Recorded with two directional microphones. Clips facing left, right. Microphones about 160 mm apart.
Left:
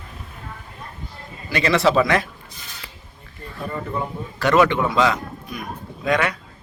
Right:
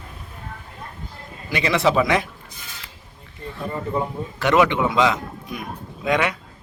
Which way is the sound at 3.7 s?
20° right (ahead or behind).